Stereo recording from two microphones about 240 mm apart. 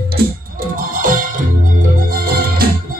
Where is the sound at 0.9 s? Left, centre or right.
Right.